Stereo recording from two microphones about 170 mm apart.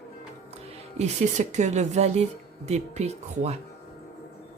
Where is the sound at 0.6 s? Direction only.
40° right (ahead or behind).